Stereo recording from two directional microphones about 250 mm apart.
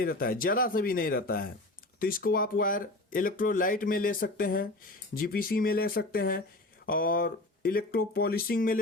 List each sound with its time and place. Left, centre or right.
0.0 s speech: left